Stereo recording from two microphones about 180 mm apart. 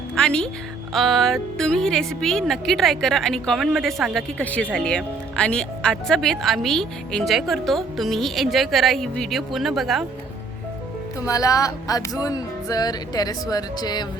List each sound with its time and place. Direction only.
0.2 s speech: 5° left (ahead or behind)
11.3 s music: 20° left (ahead or behind)